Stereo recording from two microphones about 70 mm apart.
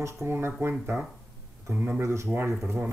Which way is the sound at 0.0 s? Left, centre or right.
Right.